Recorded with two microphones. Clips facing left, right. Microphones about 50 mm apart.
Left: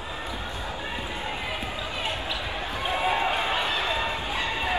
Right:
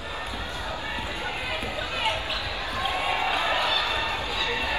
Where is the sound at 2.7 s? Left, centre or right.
Left.